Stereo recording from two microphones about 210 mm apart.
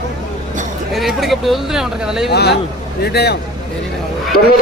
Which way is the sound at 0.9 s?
Centre (ahead or behind).